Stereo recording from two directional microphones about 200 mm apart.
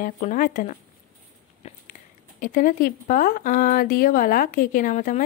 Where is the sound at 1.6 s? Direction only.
30° left (ahead or behind).